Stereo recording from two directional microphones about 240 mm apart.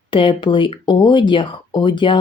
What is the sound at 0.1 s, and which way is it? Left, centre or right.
Speech, left.